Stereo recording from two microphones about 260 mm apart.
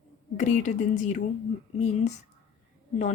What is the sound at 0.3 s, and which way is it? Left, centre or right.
Speech, left.